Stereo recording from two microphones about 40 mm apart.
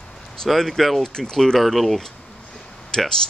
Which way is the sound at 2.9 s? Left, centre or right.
Centre.